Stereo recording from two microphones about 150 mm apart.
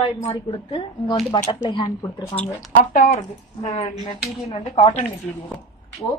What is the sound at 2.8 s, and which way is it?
Speech, 55° left (ahead or behind).